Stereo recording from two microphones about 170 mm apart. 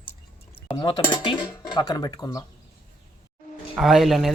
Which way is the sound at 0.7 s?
25° left (ahead or behind).